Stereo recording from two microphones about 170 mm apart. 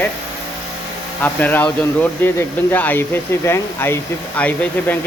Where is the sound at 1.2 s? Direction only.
10° left (ahead or behind).